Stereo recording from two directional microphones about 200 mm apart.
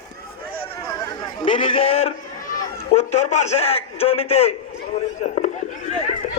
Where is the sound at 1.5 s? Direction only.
25° left (ahead or behind).